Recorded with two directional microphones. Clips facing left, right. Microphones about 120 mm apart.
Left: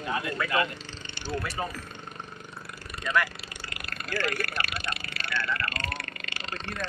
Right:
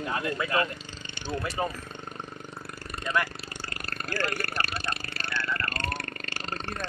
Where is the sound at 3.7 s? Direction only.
40° right (ahead or behind).